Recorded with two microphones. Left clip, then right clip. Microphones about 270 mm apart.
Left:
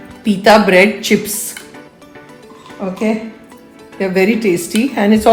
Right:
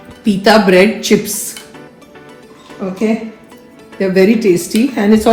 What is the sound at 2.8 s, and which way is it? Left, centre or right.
A woman's voice, left.